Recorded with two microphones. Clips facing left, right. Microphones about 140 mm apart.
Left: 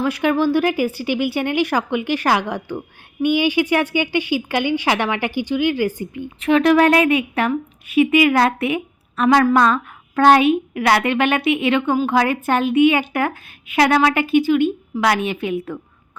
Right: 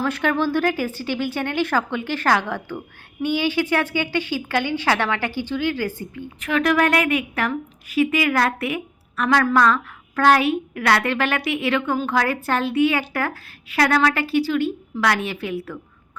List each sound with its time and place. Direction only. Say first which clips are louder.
0.0 s a woman's voice: left 4 dB; 10° left (ahead or behind)